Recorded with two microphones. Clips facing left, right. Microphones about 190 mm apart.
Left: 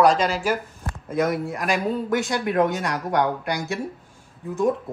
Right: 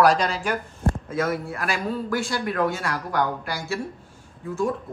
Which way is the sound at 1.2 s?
15° left (ahead or behind).